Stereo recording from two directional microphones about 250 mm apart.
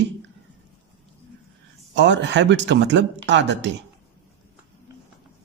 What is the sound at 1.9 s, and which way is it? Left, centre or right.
Speech, right.